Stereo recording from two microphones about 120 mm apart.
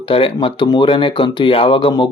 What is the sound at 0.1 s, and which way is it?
Speech, 50° left (ahead or behind).